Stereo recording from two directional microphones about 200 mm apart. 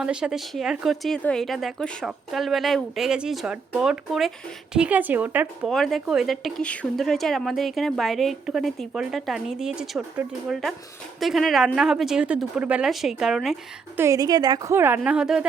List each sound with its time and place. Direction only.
0.0 s a woman's voice: 5° right (ahead or behind)
14.0 s a woman's voice: 15° right (ahead or behind)